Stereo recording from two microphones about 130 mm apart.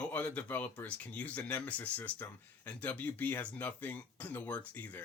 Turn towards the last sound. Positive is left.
turn(degrees=15)  # may be behind; listen again after turning